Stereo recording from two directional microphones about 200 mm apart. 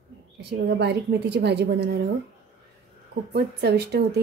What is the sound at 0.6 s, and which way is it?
A woman's voice, 55° right (ahead or behind).